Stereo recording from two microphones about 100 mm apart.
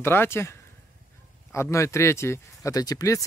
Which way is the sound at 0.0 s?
25° left (ahead or behind).